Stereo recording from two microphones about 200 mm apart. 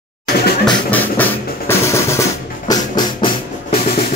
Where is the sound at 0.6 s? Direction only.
10° left (ahead or behind).